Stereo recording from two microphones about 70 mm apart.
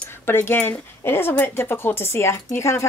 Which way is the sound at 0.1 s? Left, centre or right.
Left.